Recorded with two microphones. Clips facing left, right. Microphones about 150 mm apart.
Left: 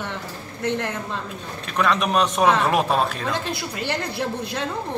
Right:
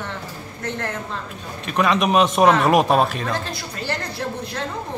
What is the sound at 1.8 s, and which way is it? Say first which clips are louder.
A man's voice: right 3 dB; 15° right (ahead or behind).